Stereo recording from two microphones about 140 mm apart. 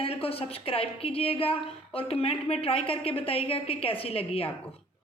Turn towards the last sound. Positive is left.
turn(degrees=45)  # may be behind; listen again after turning